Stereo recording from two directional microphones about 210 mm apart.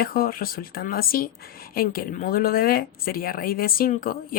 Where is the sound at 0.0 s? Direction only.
45° left (ahead or behind).